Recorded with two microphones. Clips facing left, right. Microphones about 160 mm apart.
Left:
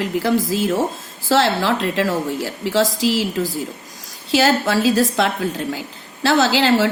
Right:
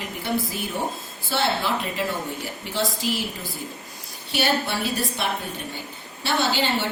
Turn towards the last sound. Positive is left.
turn(degrees=90)